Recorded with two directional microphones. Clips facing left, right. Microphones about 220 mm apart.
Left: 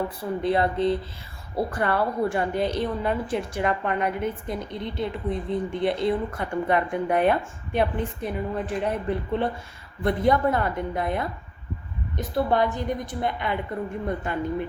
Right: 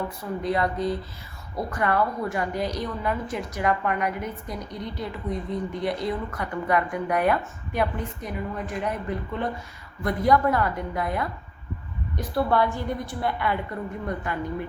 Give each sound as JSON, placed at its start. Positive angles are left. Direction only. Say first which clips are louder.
{"t": 0.2, "sound": "a woman's voice", "louder": "left 2 dB", "side_deg": 30}